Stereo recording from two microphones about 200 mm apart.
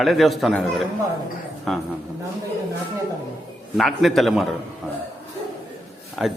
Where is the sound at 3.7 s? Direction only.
Centre (ahead or behind).